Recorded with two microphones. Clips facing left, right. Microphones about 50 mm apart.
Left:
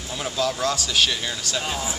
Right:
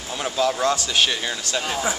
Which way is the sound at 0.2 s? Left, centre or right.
Centre.